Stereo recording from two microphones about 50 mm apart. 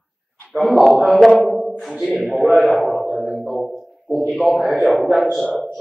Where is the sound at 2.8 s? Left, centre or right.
Centre.